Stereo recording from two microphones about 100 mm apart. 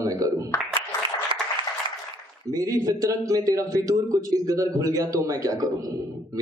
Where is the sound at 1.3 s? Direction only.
65° right (ahead or behind).